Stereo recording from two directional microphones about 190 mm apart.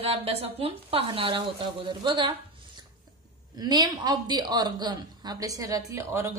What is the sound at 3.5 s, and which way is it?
A woman's voice, 20° right (ahead or behind).